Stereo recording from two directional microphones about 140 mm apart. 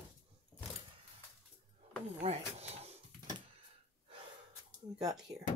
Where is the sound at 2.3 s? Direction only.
45° right (ahead or behind).